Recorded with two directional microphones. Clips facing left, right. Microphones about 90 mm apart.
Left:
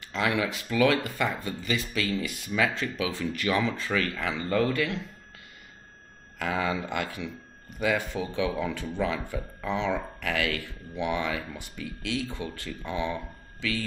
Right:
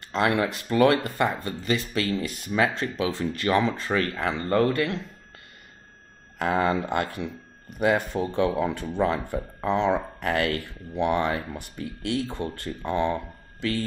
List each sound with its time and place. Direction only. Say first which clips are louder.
0.1 s speech: right 4 dB; 45° right (ahead or behind)
6.3 s speech: right 5 dB; 45° right (ahead or behind)